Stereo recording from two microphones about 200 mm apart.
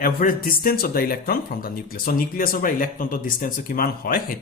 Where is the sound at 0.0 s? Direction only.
45° left (ahead or behind).